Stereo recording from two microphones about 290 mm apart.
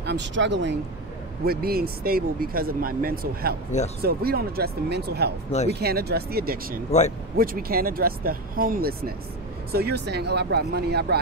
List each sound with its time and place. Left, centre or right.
0.0 s speech: right